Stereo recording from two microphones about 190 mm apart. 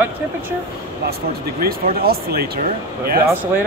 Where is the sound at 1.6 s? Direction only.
55° right (ahead or behind).